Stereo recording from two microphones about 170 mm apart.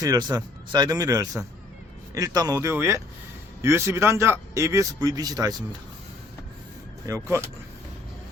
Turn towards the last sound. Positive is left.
turn(degrees=-15)  # may be behind; listen again after turning